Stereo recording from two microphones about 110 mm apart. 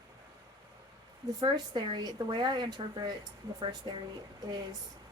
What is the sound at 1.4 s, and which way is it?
A woman's voice, 40° right (ahead or behind).